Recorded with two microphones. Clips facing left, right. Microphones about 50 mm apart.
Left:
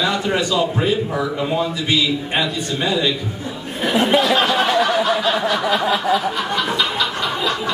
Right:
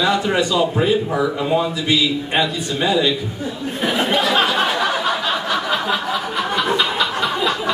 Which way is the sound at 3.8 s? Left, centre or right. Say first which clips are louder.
Left 2 dB; centre.